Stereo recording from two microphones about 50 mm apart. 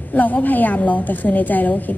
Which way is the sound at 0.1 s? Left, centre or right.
Left.